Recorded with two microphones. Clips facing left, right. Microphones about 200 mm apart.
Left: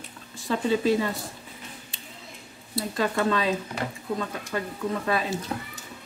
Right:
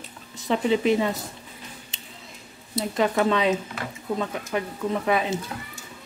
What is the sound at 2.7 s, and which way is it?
Speech, 20° right (ahead or behind).